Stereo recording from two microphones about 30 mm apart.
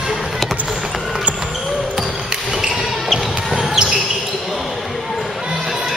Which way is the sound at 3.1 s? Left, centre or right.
Centre.